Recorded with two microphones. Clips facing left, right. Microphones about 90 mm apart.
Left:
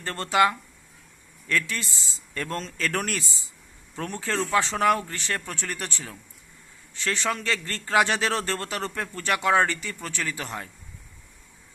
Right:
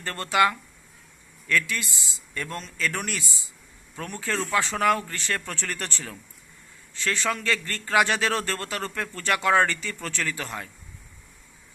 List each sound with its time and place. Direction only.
0.0 s a man's voice: 25° left (ahead or behind)